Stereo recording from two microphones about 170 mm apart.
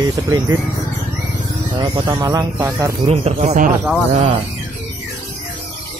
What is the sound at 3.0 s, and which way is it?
Speech, 40° right (ahead or behind).